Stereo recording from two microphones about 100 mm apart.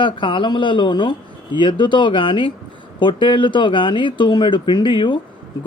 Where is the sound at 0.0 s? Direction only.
55° left (ahead or behind).